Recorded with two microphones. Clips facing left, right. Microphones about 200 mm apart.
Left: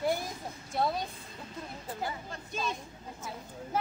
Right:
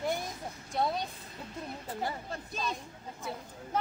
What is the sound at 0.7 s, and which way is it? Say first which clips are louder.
Speech: left 1 dB; centre (ahead or behind).